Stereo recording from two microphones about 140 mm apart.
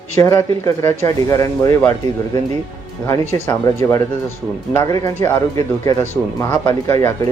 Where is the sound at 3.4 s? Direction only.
20° left (ahead or behind).